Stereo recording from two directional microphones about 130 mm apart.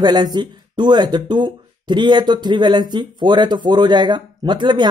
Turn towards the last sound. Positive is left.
turn(degrees=-35)  # may be behind; listen again after turning